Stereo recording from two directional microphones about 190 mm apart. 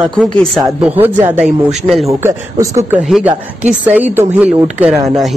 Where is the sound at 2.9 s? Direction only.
5° right (ahead or behind).